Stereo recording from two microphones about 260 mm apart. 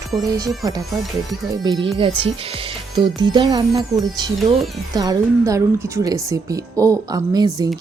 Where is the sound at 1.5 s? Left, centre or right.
Centre.